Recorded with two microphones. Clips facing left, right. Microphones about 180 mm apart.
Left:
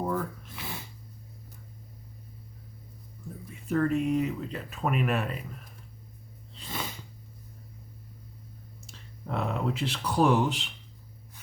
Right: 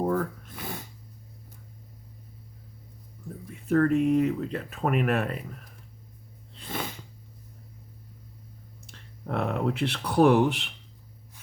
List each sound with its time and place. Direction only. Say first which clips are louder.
0.0 s a sound: right 4 dB; 55° right (ahead or behind)
3.7 s speech: right 4 dB; 55° right (ahead or behind)
6.6 s sneeze: right 3 dB; 55° right (ahead or behind)
8.9 s speech: right 3 dB; 60° right (ahead or behind)